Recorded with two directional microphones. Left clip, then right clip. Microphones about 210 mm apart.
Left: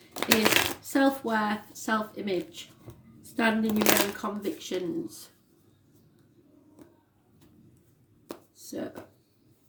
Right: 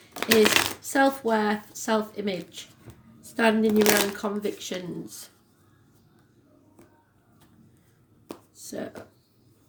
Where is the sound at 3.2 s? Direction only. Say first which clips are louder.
Right 4 dB; 35° right (ahead or behind).